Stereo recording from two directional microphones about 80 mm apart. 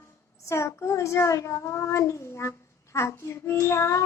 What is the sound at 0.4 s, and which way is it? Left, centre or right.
A child's voice, left.